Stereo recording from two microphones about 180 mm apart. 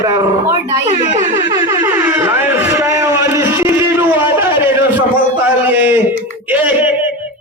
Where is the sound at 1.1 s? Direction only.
45° right (ahead or behind).